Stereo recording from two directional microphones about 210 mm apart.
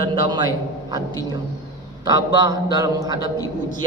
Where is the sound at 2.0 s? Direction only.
20° right (ahead or behind).